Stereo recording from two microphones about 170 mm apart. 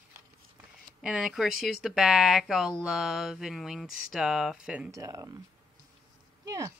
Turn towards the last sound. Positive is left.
turn(degrees=-20)  # may be behind; listen again after turning